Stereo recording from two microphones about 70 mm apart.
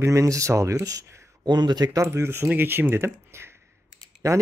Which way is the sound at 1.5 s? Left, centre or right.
Right.